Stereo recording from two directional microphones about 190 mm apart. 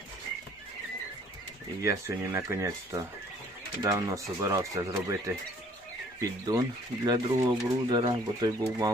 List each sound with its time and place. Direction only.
1.8 s speech: 15° right (ahead or behind)